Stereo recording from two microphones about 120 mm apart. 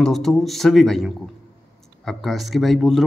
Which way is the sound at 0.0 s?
5° left (ahead or behind).